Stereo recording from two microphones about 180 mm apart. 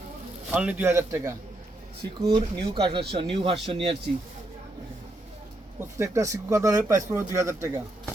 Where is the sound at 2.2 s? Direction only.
25° right (ahead or behind).